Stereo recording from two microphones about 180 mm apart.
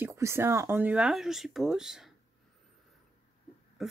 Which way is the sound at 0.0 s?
15° right (ahead or behind).